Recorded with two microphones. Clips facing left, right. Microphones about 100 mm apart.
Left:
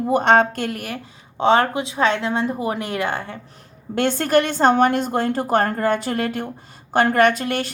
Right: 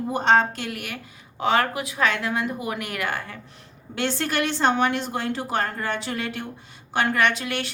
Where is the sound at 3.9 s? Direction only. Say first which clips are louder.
Left 8 dB; 50° left (ahead or behind).